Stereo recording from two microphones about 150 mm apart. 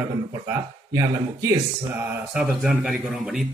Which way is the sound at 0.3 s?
20° right (ahead or behind).